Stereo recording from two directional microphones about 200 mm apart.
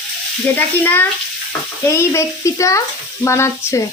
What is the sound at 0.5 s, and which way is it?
A woman's voice, 10° left (ahead or behind).